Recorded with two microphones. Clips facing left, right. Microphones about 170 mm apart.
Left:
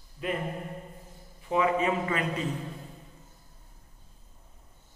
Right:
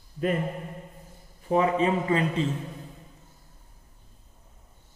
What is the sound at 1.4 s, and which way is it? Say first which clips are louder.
A man's voice: right 3 dB; 35° right (ahead or behind).